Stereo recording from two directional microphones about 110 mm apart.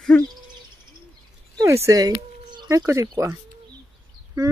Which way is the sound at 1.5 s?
30° right (ahead or behind).